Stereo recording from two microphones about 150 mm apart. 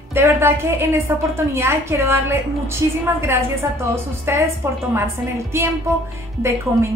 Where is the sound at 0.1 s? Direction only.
15° right (ahead or behind).